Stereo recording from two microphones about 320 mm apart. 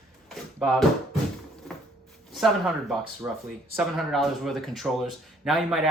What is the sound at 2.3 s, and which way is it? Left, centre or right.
Speech, centre.